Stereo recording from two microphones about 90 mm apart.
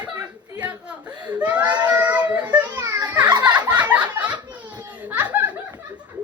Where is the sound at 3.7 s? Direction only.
15° right (ahead or behind).